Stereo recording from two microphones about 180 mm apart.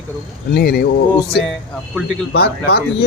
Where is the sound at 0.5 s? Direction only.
65° left (ahead or behind).